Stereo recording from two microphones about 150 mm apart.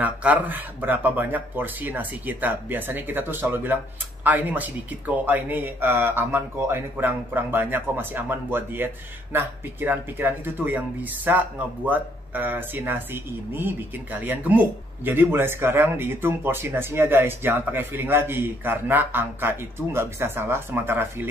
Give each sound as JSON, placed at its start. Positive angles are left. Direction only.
{"t": 0.0, "sound": "speech", "side_deg": -10}